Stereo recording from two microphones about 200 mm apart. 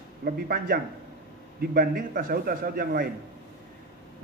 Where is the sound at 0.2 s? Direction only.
45° right (ahead or behind).